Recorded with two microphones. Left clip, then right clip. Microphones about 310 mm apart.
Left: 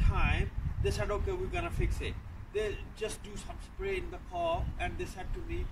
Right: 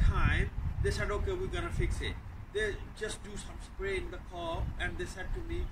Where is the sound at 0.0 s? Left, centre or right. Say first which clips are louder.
Even; centre.